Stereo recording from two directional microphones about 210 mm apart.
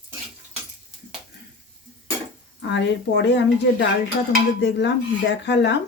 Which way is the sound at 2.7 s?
55° left (ahead or behind).